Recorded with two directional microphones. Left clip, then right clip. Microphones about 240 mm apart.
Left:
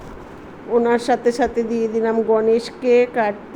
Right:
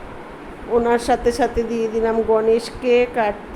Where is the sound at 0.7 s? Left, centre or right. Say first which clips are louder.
Even; centre.